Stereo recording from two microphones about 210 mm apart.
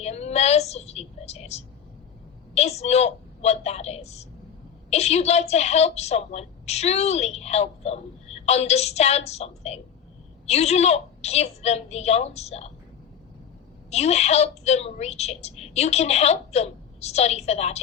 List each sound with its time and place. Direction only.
0.0 s a woman's voice: 30° left (ahead or behind)
13.9 s a woman's voice: 30° left (ahead or behind)